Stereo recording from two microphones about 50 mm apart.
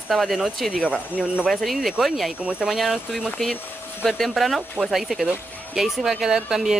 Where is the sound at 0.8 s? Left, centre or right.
Right.